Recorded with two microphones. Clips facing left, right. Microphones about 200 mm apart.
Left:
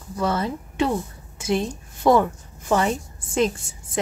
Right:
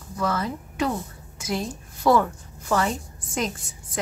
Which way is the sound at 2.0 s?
20° left (ahead or behind).